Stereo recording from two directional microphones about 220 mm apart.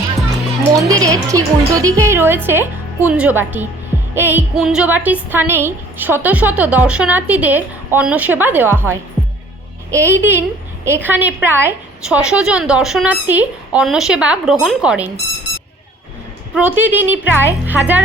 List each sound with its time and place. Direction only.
0.8 s a woman's voice: 15° right (ahead or behind)
16.6 s a woman's voice: 10° right (ahead or behind)